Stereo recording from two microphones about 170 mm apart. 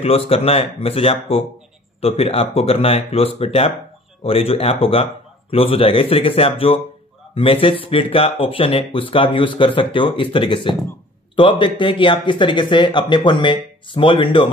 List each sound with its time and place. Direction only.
0.0 s speech: 35° left (ahead or behind)